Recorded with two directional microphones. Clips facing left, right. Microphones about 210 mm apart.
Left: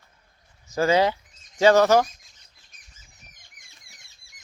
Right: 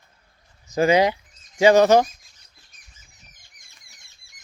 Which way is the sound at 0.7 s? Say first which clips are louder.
Right 3 dB; 15° right (ahead or behind).